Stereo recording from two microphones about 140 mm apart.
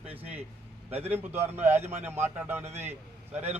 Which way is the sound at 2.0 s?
15° right (ahead or behind).